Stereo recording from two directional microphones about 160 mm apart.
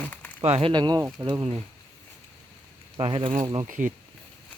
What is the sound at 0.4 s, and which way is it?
Speech, 35° right (ahead or behind).